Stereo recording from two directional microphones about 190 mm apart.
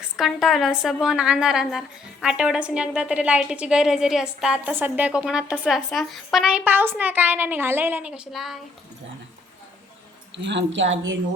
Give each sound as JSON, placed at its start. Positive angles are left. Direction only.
{"t": 0.2, "sound": "a woman's voice", "side_deg": 0}
{"t": 10.3, "sound": "speech", "side_deg": -70}